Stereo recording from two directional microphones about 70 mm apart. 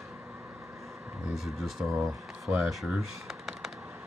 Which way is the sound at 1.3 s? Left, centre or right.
Centre.